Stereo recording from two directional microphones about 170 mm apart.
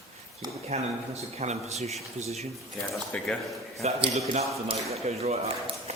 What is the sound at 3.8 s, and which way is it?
A man's voice, 40° right (ahead or behind).